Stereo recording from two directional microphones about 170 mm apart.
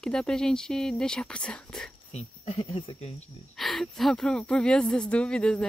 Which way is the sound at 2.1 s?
35° left (ahead or behind).